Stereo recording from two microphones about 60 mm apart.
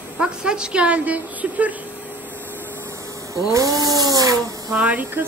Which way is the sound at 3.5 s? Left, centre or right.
Right.